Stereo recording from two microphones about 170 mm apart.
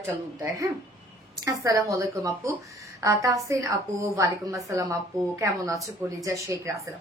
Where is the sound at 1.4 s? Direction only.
20° right (ahead or behind).